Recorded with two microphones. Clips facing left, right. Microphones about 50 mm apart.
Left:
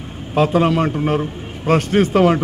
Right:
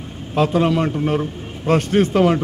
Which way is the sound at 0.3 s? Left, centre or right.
Centre.